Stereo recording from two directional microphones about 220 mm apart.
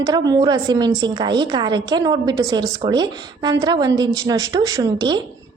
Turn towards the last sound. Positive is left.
turn(degrees=-20)  # may be behind; listen again after turning